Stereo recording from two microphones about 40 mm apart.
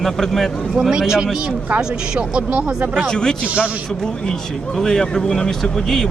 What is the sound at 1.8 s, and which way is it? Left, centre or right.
Speech, right.